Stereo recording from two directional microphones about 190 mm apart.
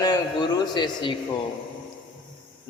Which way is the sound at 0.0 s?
20° left (ahead or behind).